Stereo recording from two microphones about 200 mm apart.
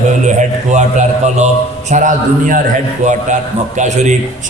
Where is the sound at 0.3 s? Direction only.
35° right (ahead or behind).